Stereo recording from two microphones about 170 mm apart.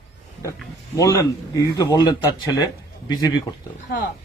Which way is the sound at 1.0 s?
20° left (ahead or behind).